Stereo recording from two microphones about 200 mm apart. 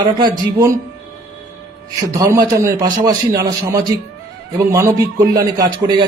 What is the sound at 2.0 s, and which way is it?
A man's voice, 15° right (ahead or behind).